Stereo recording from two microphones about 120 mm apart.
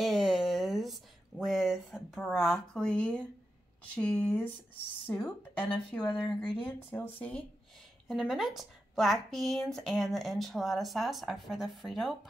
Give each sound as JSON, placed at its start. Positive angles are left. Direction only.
{"t": 0.0, "sound": "a sound", "side_deg": 0}
{"t": 1.4, "sound": "speech", "side_deg": 0}
{"t": 8.1, "sound": "a woman's voice", "side_deg": 0}